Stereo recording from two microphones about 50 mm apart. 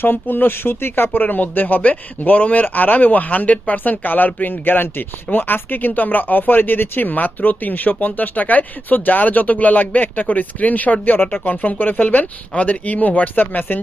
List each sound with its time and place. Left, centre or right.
0.0 s speech: left